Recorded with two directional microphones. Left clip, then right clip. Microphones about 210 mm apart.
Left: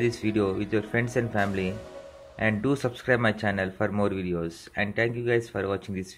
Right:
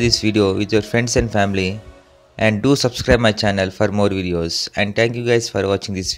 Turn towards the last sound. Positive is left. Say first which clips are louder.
# right 10 dB
turn(degrees=-35)  # may be behind; listen again after turning